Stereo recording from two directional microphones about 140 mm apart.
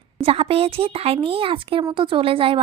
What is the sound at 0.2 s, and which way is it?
Speech, 40° right (ahead or behind).